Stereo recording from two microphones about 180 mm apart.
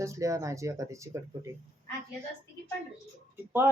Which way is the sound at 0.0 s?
15° right (ahead or behind).